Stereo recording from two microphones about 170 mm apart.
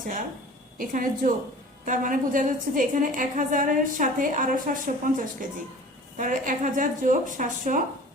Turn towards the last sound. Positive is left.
turn(degrees=-50)  # may be behind; listen again after turning